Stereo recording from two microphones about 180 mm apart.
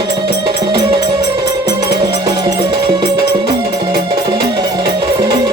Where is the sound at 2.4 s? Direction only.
25° right (ahead or behind).